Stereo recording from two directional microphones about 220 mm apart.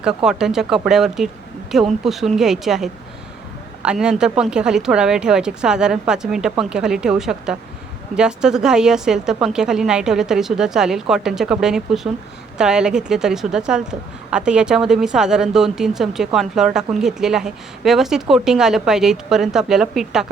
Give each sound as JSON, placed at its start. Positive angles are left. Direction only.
{"t": 0.0, "sound": "speech", "side_deg": 0}